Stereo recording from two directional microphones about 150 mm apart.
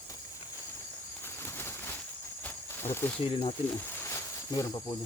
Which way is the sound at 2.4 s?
15° left (ahead or behind).